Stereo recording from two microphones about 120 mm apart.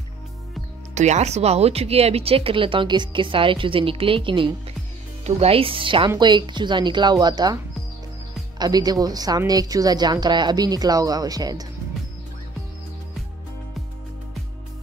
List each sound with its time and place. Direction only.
0.9 s speech: 75° right (ahead or behind); by 4.5 s 45° right (ahead or behind)
5.2 s speech: 55° right (ahead or behind); by 7.5 s 35° right (ahead or behind)
8.5 s speech: 35° right (ahead or behind)